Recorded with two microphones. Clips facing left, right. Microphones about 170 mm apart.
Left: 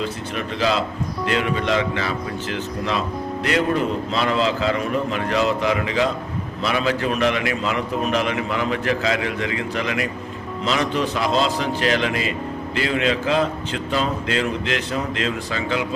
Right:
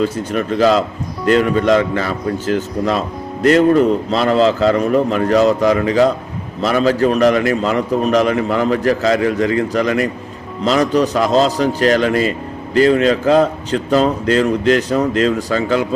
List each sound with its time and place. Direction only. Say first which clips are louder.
0.0 s a man's voice: right 8 dB; 45° right (ahead or behind)